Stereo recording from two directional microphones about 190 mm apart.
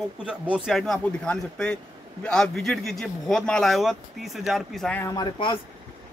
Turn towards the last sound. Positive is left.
turn(degrees=25)  # may be behind; listen again after turning